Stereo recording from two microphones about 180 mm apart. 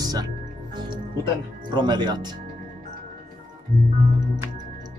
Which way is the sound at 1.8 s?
25° right (ahead or behind).